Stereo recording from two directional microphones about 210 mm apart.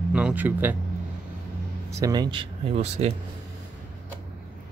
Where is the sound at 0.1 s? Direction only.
5° right (ahead or behind).